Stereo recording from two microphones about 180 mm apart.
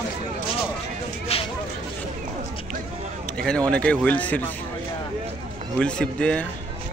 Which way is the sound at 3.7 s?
5° left (ahead or behind).